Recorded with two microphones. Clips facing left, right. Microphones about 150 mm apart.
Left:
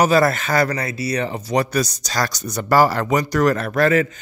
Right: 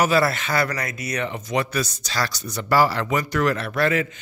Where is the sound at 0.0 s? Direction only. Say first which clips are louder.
Left 4 dB; 45° left (ahead or behind).